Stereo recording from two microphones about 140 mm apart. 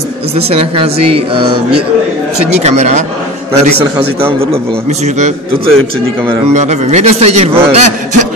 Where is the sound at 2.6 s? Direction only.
50° right (ahead or behind).